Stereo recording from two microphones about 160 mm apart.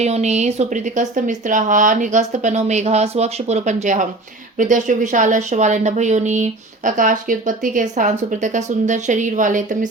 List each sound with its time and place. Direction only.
0.0 s speech: 45° right (ahead or behind)